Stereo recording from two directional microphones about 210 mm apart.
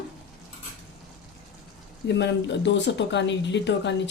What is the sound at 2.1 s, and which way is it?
Speech, 55° left (ahead or behind).